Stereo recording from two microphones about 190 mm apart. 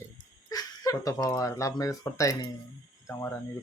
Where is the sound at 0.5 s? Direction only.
20° left (ahead or behind).